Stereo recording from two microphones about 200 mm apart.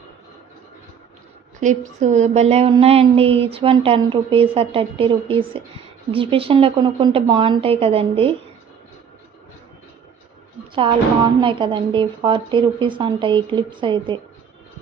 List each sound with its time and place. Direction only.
1.6 s a woman's voice: 40° right (ahead or behind)
10.7 s a woman's voice: 25° right (ahead or behind)